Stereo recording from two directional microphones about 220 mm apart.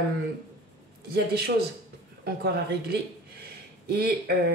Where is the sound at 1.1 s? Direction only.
45° right (ahead or behind).